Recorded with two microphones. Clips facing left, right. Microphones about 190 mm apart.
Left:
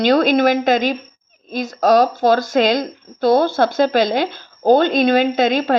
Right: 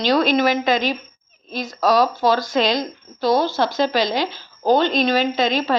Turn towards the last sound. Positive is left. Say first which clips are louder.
# left 4 dB
turn(degrees=50)  # may be behind; listen again after turning